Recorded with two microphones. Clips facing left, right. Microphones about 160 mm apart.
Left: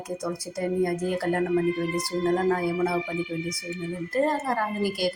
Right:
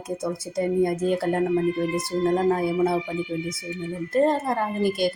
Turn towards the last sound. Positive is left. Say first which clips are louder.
# right 3 dB
turn(degrees=-25)  # may be behind; listen again after turning